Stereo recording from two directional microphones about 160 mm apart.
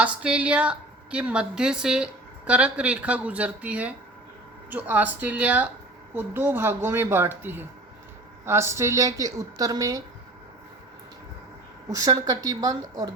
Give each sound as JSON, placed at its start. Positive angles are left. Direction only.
{"t": 0.0, "sound": "a woman's voice", "side_deg": -5}
{"t": 11.9, "sound": "a woman's voice", "side_deg": -20}